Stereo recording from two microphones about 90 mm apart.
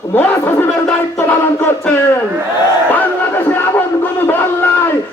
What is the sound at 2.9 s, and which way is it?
Crowd, 20° left (ahead or behind).